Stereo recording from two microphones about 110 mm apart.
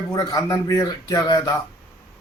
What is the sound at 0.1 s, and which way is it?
A man's voice, 35° left (ahead or behind).